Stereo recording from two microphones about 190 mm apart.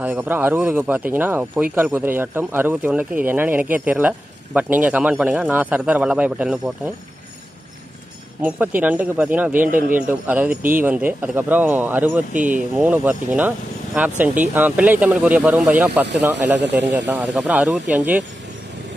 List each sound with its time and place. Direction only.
0.0 s speech: 10° right (ahead or behind)
8.4 s speech: 10° right (ahead or behind)
9.7 s speech: 45° right (ahead or behind)
9.9 s speech: 10° right (ahead or behind)
12.4 s speech: 45° right (ahead or behind)
12.7 s speech: 10° right (ahead or behind)
16.5 s speech: 65° right (ahead or behind)
16.9 s speech: 10° right (ahead or behind)